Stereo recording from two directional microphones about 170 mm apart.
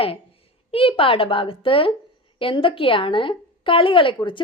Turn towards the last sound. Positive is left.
turn(degrees=30)  # may be behind; listen again after turning